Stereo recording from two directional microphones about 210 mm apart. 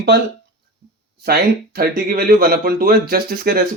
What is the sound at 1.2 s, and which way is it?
Speech, 45° right (ahead or behind).